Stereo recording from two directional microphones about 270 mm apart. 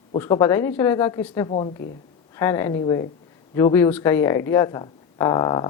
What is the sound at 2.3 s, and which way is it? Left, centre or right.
Speech, centre.